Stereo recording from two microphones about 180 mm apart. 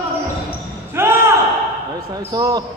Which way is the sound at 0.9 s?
15° right (ahead or behind).